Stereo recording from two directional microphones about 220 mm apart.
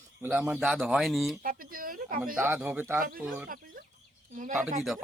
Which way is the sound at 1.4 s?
40° right (ahead or behind).